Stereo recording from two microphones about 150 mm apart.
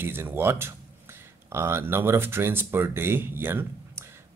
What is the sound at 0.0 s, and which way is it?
Speech, 15° right (ahead or behind).